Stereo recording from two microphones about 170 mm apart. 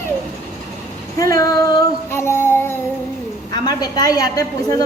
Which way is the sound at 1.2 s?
20° left (ahead or behind).